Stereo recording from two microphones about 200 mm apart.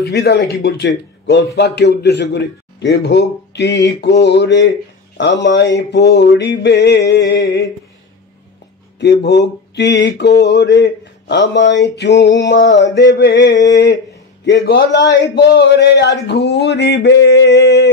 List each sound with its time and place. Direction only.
0.1 s a man's voice: 55° left (ahead or behind)
9.0 s a man's voice: 60° left (ahead or behind)